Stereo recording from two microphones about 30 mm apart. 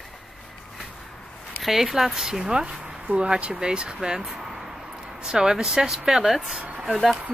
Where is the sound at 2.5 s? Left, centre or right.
Right.